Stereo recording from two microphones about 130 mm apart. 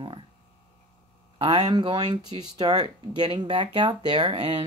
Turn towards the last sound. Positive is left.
turn(degrees=-50)  # may be behind; listen again after turning